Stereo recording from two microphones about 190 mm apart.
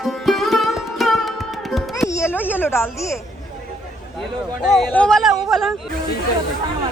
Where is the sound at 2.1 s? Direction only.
15° left (ahead or behind).